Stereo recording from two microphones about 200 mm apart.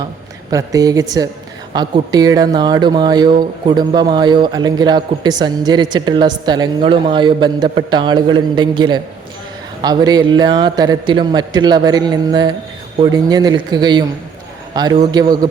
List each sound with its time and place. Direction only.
0.5 s a woman's voice: 15° right (ahead or behind)